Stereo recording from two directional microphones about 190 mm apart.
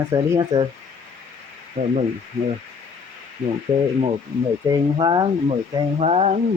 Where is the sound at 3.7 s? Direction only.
30° right (ahead or behind).